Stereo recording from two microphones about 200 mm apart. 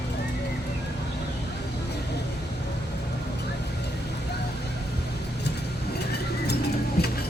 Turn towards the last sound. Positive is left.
turn(degrees=50)  # may be behind; listen again after turning